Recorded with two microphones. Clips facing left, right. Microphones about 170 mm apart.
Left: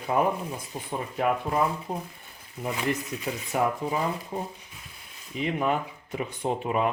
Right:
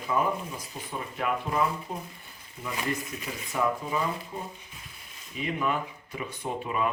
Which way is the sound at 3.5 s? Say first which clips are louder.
Left 2 dB; 60° left (ahead or behind).